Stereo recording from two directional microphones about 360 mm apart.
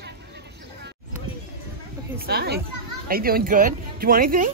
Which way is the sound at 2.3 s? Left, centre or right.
Right.